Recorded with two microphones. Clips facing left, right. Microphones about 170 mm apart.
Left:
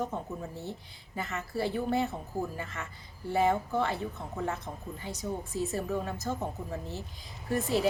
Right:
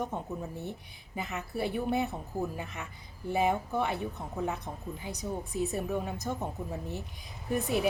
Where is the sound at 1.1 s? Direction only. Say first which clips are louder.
Left 1 dB; 15° right (ahead or behind).